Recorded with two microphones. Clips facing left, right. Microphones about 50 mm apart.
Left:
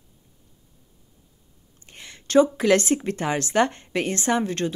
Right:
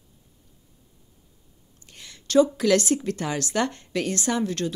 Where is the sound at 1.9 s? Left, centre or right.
Left.